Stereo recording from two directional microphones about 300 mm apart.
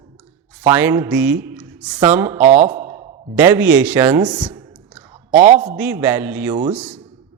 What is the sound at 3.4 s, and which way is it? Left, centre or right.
Speech, centre.